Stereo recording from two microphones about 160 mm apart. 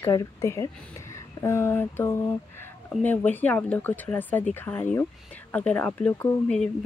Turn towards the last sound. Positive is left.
turn(degrees=10)  # may be behind; listen again after turning